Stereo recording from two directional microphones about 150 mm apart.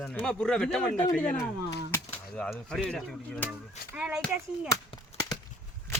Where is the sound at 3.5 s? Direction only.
10° right (ahead or behind).